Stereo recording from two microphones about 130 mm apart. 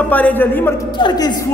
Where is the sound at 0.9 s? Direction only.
35° left (ahead or behind).